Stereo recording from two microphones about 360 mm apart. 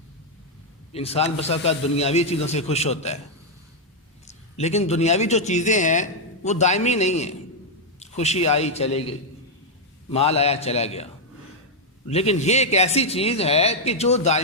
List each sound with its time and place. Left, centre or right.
0.9 s a man's voice: centre
4.5 s a man's voice: centre